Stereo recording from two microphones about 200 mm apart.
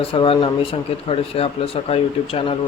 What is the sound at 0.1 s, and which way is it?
Speech, 25° left (ahead or behind).